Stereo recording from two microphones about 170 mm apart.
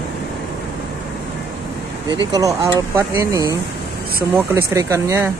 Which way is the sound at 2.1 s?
20° right (ahead or behind).